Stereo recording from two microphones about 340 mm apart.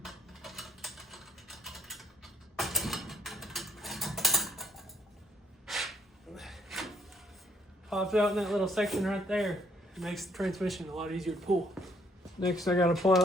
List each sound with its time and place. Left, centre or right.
0.0 s typing: centre
5.6 s rub: centre
7.9 s a man's voice: centre